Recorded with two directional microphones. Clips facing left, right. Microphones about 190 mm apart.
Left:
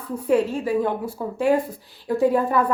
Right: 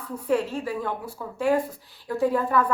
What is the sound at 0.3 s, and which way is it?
Speech, 15° left (ahead or behind).